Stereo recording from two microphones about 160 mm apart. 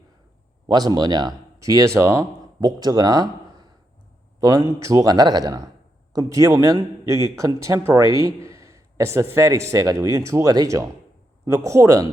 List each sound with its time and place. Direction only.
0.7 s speech: 25° right (ahead or behind)